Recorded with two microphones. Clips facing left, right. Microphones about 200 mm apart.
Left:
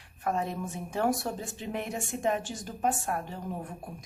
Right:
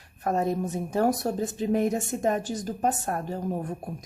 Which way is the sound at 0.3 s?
40° right (ahead or behind).